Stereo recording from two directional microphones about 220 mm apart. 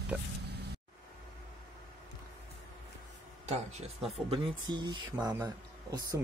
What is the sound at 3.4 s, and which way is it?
Speech, 30° right (ahead or behind).